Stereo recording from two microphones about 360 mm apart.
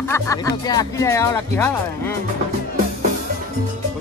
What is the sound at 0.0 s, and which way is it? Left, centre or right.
Speech, centre.